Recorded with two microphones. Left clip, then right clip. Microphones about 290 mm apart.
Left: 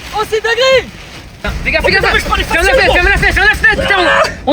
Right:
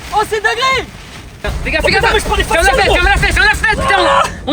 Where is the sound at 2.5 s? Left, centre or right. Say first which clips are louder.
Left 1 dB; right.